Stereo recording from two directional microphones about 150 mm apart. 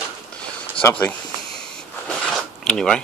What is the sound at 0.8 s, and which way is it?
Speech, 10° left (ahead or behind).